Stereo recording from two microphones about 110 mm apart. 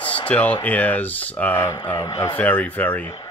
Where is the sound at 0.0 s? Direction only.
50° left (ahead or behind).